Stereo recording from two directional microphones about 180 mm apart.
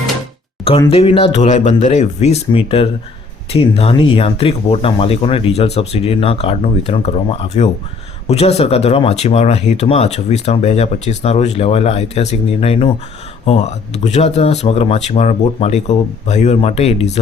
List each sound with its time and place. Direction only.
0.9 s speech: 30° left (ahead or behind)